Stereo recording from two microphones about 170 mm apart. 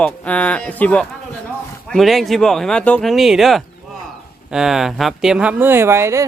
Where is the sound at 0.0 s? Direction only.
10° left (ahead or behind).